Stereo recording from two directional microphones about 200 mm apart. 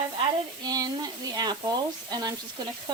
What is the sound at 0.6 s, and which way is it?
Speech, 20° right (ahead or behind).